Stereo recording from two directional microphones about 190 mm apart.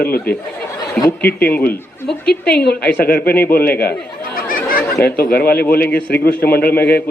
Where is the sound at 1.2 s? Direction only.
10° left (ahead or behind).